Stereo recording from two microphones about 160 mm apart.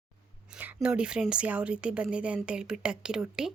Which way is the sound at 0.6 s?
10° right (ahead or behind).